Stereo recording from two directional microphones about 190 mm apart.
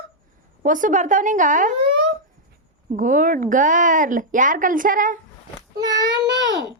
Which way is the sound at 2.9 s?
45° right (ahead or behind).